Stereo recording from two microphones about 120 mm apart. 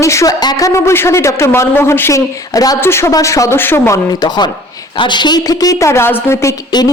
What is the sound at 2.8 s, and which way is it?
Speech, 20° left (ahead or behind).